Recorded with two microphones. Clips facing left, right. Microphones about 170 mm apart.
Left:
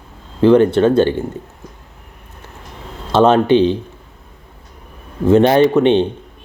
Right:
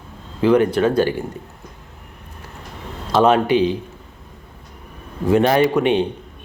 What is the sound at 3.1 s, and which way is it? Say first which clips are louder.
Speech: left 4 dB; 25° left (ahead or behind).